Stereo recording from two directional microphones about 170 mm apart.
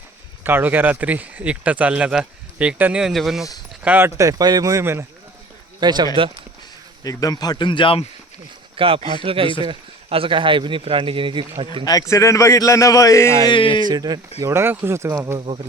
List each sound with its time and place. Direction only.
0.4 s speech: 10° right (ahead or behind)
5.8 s speech: 25° right (ahead or behind)
7.0 s speech: 20° left (ahead or behind)
8.7 s speech: 30° right (ahead or behind)
11.9 s a man's voice: 20° left (ahead or behind)
13.5 s speech: 30° left (ahead or behind)
13.8 s speech: 25° right (ahead or behind)
15.4 s speech: 30° right (ahead or behind)